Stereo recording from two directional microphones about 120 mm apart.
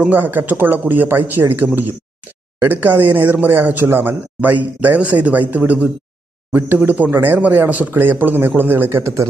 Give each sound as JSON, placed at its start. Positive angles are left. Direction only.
{"t": 0.0, "sound": "speech", "side_deg": -15}